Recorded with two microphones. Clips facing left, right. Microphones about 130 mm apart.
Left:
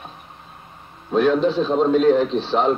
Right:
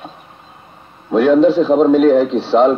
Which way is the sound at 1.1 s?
70° right (ahead or behind).